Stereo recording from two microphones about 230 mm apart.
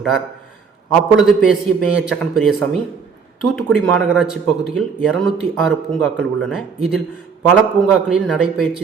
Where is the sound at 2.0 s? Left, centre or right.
Centre.